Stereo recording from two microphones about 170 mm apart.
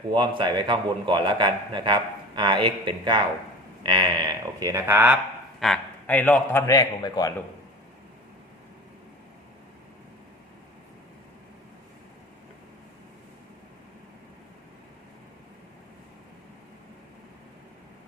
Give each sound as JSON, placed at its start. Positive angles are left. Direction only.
{"t": 0.1, "sound": "a man's voice", "side_deg": -30}
{"t": 5.5, "sound": "a man's voice", "side_deg": 5}
{"t": 6.7, "sound": "a man's voice", "side_deg": 20}